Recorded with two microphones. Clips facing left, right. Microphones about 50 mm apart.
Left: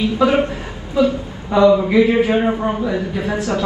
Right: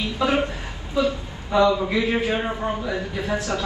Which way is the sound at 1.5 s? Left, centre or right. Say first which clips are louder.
Left 6 dB; left.